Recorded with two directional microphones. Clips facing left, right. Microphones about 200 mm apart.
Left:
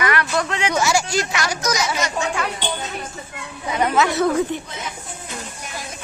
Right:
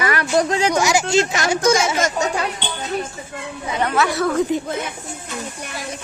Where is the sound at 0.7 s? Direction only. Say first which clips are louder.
Right 2 dB; 15° right (ahead or behind).